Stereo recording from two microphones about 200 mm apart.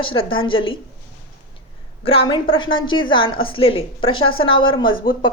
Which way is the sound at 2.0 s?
25° left (ahead or behind).